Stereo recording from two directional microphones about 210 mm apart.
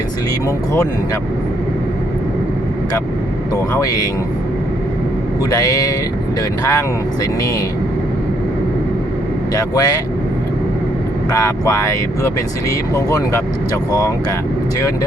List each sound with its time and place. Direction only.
3.5 s speech: 15° left (ahead or behind)
5.5 s speech: 15° left (ahead or behind)
9.6 s speech: 15° left (ahead or behind)
11.3 s speech: 15° left (ahead or behind)